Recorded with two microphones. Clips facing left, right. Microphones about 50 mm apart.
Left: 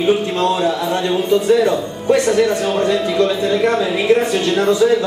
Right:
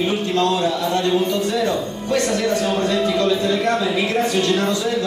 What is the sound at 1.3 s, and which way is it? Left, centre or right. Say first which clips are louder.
A man's voice: left 7 dB; centre.